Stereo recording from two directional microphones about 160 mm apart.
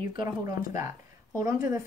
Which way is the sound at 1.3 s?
20° right (ahead or behind).